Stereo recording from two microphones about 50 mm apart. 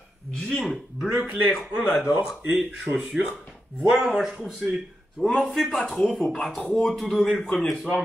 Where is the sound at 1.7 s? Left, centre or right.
Right.